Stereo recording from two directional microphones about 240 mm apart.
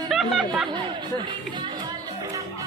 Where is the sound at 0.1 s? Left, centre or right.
Centre.